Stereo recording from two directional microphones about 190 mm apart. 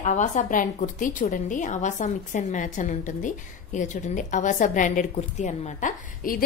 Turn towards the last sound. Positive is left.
turn(degrees=45)  # may be behind; listen again after turning